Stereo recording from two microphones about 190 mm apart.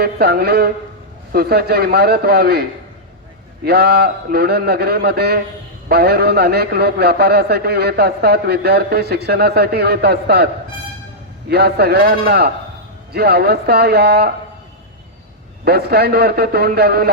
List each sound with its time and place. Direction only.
0.0 s a man's voice: 55° right (ahead or behind)
15.6 s a man's voice: 55° right (ahead or behind)